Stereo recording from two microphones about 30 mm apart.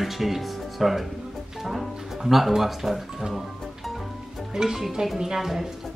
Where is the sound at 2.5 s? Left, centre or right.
Centre.